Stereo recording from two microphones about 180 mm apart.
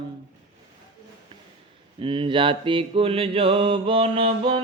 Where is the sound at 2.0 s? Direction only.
30° right (ahead or behind).